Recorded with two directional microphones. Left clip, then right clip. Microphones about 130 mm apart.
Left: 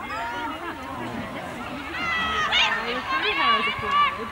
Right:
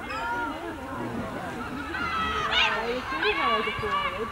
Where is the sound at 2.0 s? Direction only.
10° left (ahead or behind).